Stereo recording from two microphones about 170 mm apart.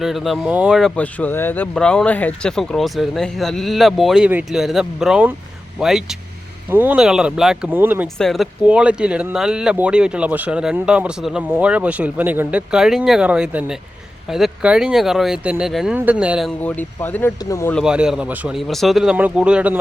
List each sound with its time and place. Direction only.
0.0 s speech: centre (ahead or behind)
8.2 s speech: centre (ahead or behind)
16.6 s speech: 10° left (ahead or behind)
17.7 s speech: 5° right (ahead or behind)